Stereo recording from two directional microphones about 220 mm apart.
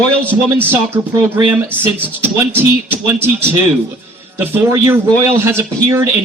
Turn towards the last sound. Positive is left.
turn(degrees=-10)  # may be behind; listen again after turning